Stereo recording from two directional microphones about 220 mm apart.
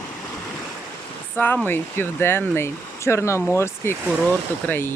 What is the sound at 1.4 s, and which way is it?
Speech, 10° left (ahead or behind).